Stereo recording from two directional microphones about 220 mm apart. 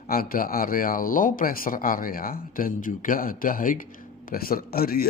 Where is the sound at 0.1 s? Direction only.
40° left (ahead or behind).